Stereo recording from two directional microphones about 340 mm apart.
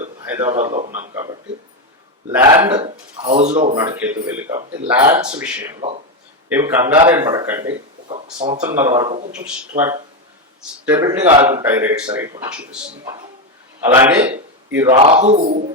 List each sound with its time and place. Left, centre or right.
0.0 s a sound: centre
0.4 s a man's voice: centre
1.0 s a sound: centre
2.3 s speech: centre
3.8 s speech: centre
8.5 s speech: centre
11.2 s a man's voice: centre
11.5 s speech: centre
13.8 s speech: centre